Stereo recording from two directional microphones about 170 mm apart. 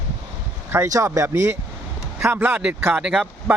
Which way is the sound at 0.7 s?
15° right (ahead or behind).